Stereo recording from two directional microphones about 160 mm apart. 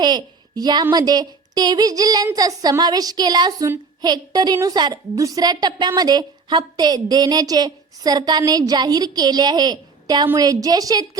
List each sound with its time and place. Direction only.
0.0 s a woman's voice: 25° right (ahead or behind)